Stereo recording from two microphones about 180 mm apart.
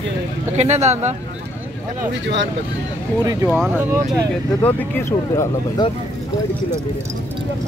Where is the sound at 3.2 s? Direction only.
20° right (ahead or behind).